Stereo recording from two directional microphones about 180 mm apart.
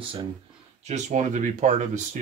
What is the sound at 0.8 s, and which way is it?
Speech, 40° right (ahead or behind).